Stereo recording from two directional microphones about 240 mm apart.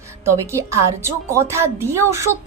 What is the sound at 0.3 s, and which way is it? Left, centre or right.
A woman's voice, centre.